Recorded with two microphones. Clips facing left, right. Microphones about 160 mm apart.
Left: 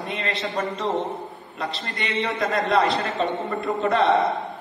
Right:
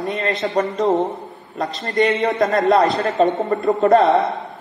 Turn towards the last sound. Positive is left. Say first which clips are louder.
# right 3 dB
turn(degrees=0)  # may be behind; listen again after turning